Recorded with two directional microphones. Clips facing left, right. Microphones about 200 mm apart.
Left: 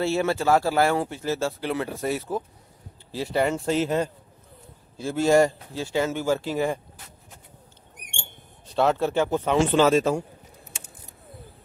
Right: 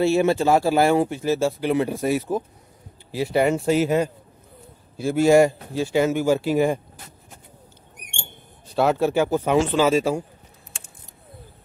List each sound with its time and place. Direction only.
0.0 s speech: 15° right (ahead or behind)
8.7 s speech: 10° right (ahead or behind)